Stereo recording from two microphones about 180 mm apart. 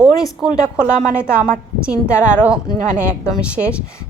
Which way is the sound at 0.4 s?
5° right (ahead or behind).